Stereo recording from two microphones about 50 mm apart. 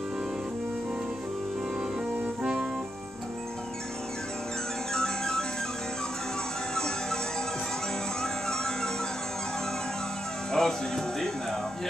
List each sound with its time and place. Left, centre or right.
2.4 s music: right
4.9 s music: centre
6.7 s music: centre
8.2 s music: centre
10.5 s music: centre